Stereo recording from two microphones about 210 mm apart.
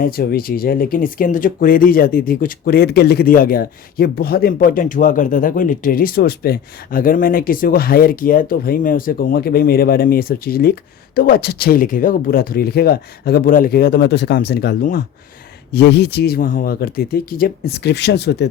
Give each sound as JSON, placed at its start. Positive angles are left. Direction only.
{"t": 0.0, "sound": "speech", "side_deg": 45}
{"t": 15.7, "sound": "speech", "side_deg": 50}